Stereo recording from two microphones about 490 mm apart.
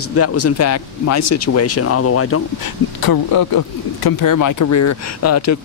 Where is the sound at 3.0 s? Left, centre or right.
Left.